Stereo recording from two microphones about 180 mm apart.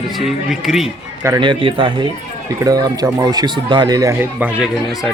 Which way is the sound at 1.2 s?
20° right (ahead or behind).